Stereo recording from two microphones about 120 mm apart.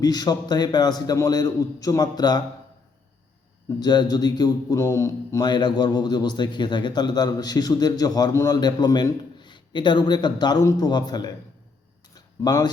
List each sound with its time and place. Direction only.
0.0 s speech: 35° left (ahead or behind)
3.8 s speech: 35° left (ahead or behind)
5.5 s speech: 40° left (ahead or behind)
12.1 s a sound: 30° left (ahead or behind)